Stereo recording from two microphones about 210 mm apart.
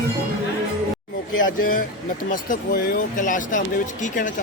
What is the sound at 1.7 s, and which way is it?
Speech, 40° left (ahead or behind).